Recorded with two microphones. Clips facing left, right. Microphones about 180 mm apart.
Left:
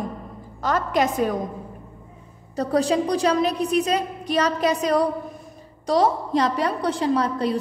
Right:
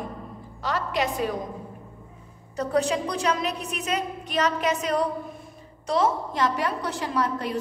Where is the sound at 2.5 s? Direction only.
35° left (ahead or behind).